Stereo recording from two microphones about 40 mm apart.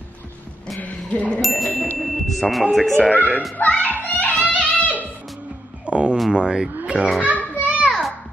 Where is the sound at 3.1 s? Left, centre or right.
Left.